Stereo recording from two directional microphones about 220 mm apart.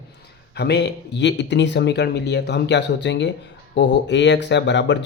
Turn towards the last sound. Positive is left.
turn(degrees=50)  # may be behind; listen again after turning